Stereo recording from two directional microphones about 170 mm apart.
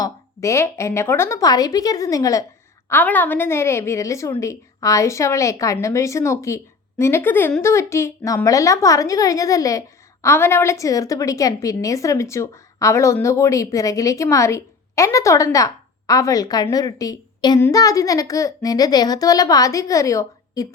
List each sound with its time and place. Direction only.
0.0 s a woman's voice: 15° left (ahead or behind)